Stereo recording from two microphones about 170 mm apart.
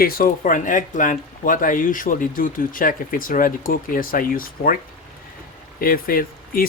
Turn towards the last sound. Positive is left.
turn(degrees=60)  # may be behind; listen again after turning